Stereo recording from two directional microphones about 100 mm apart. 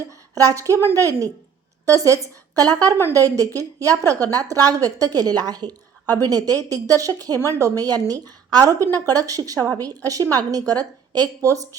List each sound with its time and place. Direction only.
0.3 s a woman's voice: 35° right (ahead or behind)